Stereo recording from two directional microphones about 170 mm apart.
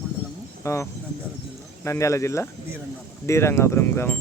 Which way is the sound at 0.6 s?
15° left (ahead or behind).